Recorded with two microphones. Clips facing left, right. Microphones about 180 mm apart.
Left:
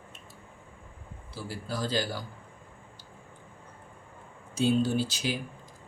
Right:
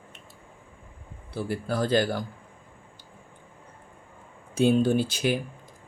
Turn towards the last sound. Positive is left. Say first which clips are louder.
# right 5 dB
turn(degrees=-55)  # may be behind; listen again after turning